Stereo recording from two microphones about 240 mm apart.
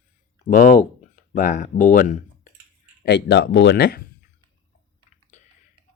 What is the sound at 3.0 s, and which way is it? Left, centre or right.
Speech, left.